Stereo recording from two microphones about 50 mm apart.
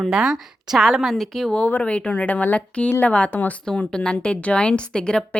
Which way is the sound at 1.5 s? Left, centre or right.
Left.